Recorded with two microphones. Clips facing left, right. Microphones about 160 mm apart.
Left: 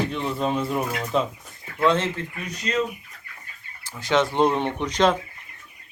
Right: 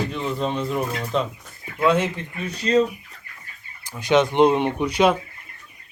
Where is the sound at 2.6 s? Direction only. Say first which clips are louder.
Right 7 dB; 30° right (ahead or behind).